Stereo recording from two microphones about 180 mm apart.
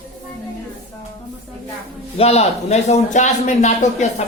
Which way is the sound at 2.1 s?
35° left (ahead or behind).